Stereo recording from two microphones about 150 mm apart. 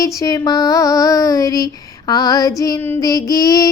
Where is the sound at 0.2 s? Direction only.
25° left (ahead or behind).